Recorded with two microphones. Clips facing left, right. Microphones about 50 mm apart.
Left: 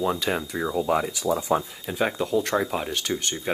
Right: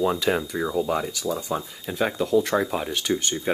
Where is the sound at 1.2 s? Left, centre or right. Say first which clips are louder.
Left 4 dB; left.